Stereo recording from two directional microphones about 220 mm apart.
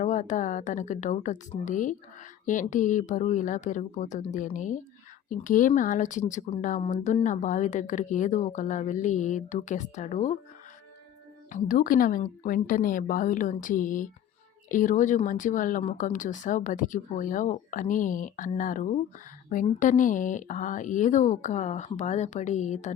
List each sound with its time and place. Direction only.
0.0 s speech: 35° left (ahead or behind)
11.5 s speech: 35° left (ahead or behind)